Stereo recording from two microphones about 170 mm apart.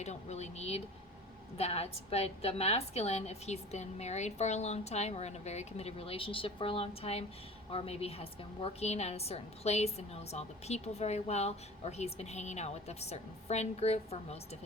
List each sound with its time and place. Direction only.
0.0 s a woman's voice: 40° left (ahead or behind)